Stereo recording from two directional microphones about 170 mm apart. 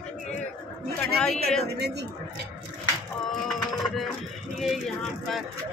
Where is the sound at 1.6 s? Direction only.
75° right (ahead or behind).